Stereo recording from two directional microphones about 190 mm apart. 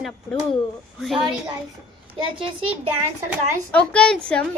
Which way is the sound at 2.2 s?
30° right (ahead or behind).